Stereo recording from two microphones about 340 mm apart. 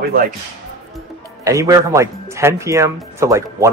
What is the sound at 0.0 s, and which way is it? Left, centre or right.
Speech, right.